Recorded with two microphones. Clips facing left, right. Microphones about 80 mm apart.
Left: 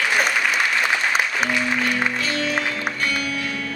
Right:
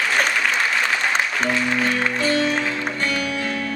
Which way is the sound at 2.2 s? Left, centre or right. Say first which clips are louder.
Right 3 dB; right.